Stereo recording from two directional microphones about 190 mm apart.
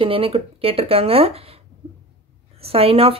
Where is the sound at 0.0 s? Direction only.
30° right (ahead or behind).